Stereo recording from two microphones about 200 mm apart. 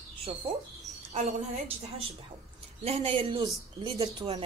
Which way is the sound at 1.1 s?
35° right (ahead or behind).